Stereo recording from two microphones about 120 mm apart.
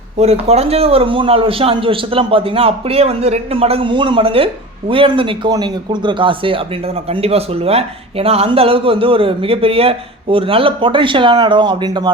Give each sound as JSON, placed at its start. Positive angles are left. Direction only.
{"t": 0.2, "sound": "speech", "side_deg": -60}